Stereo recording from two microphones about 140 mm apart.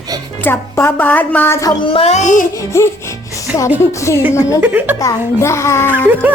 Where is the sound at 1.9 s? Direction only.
50° left (ahead or behind); by 2.5 s 65° left (ahead or behind).